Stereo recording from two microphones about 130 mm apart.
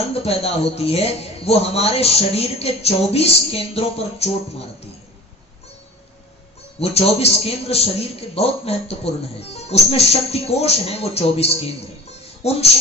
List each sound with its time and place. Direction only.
0.1 s a man's voice: 50° left (ahead or behind)
6.8 s a man's voice: 50° left (ahead or behind)